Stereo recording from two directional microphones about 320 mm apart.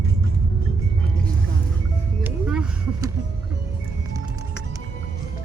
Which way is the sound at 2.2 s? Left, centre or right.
Centre.